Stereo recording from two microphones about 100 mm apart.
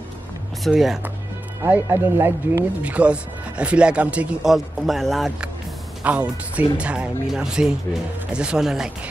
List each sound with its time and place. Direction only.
0.7 s speech: 5° right (ahead or behind)
1.6 s speech: 20° right (ahead or behind)
2.8 s speech: 15° right (ahead or behind)
6.0 s speech: 15° right (ahead or behind)